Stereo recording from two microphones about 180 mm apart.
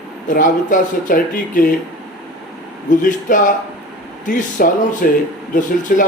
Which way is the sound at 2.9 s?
45° left (ahead or behind).